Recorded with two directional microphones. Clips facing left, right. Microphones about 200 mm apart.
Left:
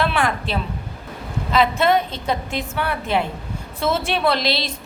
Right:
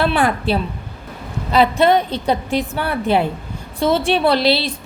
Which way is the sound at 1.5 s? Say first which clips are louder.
Right 4 dB; 35° right (ahead or behind).